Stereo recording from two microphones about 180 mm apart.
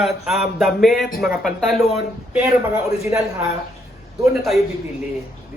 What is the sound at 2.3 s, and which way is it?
Speech, 10° right (ahead or behind).